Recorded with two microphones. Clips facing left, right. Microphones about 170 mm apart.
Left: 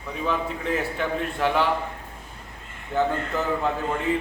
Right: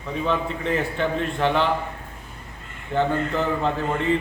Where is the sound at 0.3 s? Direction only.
5° left (ahead or behind).